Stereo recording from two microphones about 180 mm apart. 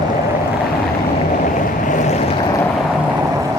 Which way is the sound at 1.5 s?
45° left (ahead or behind).